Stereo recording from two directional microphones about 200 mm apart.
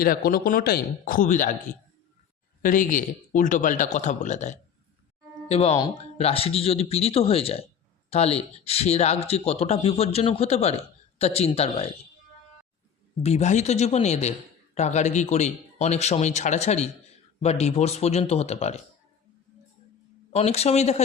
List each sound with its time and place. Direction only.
0.0 s a man's voice: 45° left (ahead or behind)
2.6 s a man's voice: 40° left (ahead or behind)
13.2 s a man's voice: 35° left (ahead or behind)
20.3 s a man's voice: 30° left (ahead or behind)